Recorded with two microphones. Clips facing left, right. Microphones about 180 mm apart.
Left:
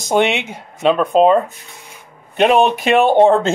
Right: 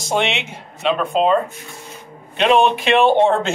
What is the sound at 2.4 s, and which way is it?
Speech, 45° left (ahead or behind).